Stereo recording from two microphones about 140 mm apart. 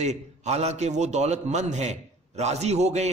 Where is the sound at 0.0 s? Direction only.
50° right (ahead or behind).